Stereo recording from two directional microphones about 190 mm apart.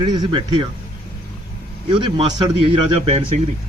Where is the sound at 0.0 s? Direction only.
20° right (ahead or behind).